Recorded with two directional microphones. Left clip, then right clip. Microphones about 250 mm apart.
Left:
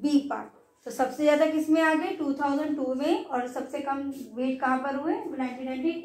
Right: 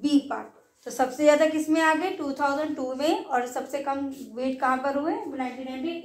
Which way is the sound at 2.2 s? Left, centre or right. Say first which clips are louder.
Right 2 dB; right.